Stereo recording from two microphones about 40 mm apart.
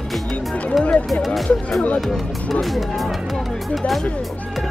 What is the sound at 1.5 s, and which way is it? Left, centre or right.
Speech, left.